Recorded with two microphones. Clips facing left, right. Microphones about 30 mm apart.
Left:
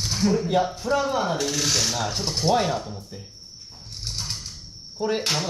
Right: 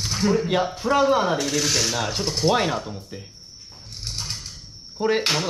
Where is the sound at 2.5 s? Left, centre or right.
Right.